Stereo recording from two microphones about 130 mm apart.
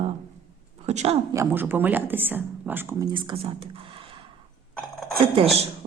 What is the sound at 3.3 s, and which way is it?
Speech, 45° right (ahead or behind).